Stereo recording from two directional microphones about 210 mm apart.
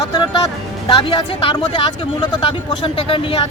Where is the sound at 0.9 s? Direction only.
25° left (ahead or behind).